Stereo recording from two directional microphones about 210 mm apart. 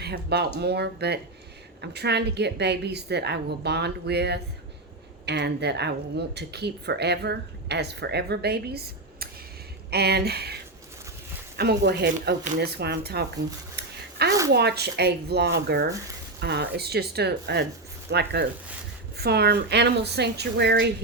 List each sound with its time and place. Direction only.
0.0 s speech: 50° right (ahead or behind)